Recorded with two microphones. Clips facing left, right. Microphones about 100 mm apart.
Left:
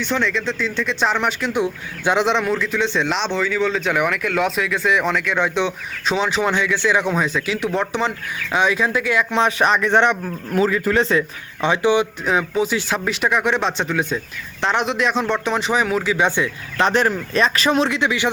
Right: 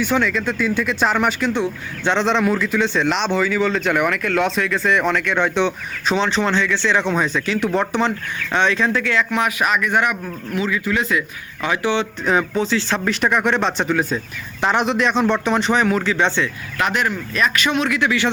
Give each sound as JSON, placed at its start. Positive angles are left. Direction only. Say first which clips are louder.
{"t": 0.0, "sound": "speech", "louder": "right 2 dB", "side_deg": -5}
{"t": 1.5, "sound": "speech", "louder": "left 1 dB", "side_deg": 10}
{"t": 10.5, "sound": "speech", "louder": "left 4 dB", "side_deg": 40}
{"t": 11.6, "sound": "speech", "louder": "left 3 dB", "side_deg": 20}
{"t": 12.2, "sound": "speech", "louder": "right 1 dB", "side_deg": 0}
{"t": 16.7, "sound": "speech", "louder": "left 4 dB", "side_deg": 30}